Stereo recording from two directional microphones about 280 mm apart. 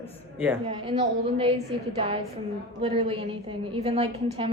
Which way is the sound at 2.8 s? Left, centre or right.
Centre.